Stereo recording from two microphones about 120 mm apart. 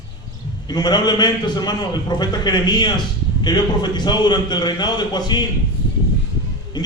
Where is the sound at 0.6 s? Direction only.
35° left (ahead or behind).